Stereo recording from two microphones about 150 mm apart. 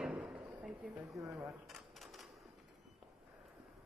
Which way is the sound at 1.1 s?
20° right (ahead or behind).